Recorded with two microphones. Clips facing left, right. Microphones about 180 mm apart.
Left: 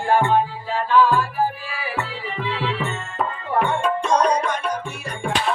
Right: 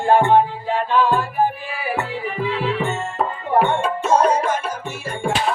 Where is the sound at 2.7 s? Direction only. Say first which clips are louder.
Right 4 dB; 35° right (ahead or behind).